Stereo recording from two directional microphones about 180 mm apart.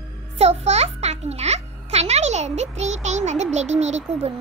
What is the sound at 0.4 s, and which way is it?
Music, 35° right (ahead or behind).